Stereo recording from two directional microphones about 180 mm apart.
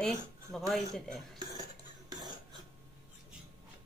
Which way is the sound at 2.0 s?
25° right (ahead or behind).